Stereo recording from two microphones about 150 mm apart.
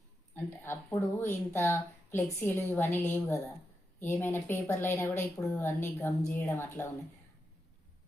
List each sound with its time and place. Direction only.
0.3 s speech: 15° left (ahead or behind)